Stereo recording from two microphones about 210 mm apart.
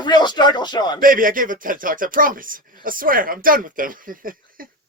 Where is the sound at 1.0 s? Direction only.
40° right (ahead or behind).